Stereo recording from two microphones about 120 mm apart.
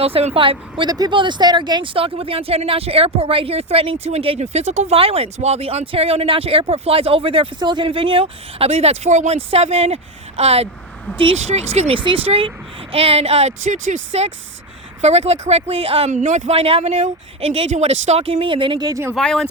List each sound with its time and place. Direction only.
0.0 s speech: 55° right (ahead or behind)
0.9 s speech: 35° right (ahead or behind); by 4.9 s 70° right (ahead or behind)
4.9 s speech: 50° right (ahead or behind); by 14.3 s 75° right (ahead or behind)
15.0 s speech: 65° right (ahead or behind)
17.7 s speech: 80° right; by 18.9 s 45° right (ahead or behind)
18.9 s speech: 25° right (ahead or behind)
19.1 s speech: 5° left (ahead or behind)